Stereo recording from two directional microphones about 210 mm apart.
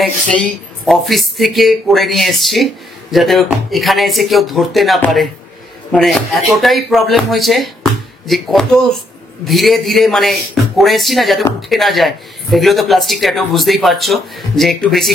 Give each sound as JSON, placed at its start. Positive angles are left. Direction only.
{"t": 0.0, "sound": "a woman's voice", "side_deg": 0}